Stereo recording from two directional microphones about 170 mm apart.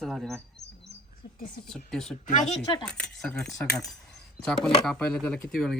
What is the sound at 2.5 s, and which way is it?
Speech, 30° left (ahead or behind).